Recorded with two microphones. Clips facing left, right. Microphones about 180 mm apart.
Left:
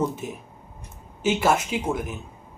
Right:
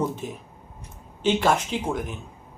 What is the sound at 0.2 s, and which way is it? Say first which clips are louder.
Speech: even; 5° left (ahead or behind).